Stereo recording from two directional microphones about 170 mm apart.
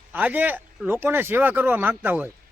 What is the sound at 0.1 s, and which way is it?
A man's voice, 10° right (ahead or behind).